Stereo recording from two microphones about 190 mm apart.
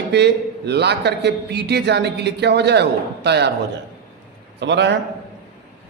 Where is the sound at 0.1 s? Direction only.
60° right (ahead or behind).